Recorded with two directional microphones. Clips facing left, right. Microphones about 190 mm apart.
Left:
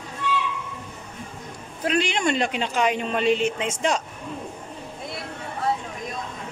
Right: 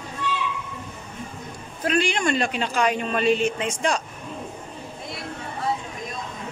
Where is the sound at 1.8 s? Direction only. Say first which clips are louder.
Even; 20° left (ahead or behind).